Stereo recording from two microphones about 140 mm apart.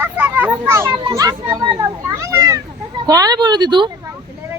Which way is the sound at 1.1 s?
25° right (ahead or behind).